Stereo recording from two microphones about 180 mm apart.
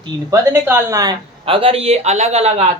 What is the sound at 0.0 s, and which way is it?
Speech, 20° right (ahead or behind).